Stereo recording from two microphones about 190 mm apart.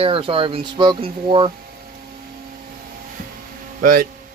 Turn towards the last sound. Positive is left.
turn(degrees=-50)  # may be behind; listen again after turning